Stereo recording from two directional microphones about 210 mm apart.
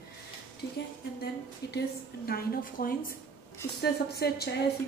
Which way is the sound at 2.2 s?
45° left (ahead or behind).